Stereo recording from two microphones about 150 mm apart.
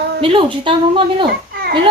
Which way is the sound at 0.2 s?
35° right (ahead or behind).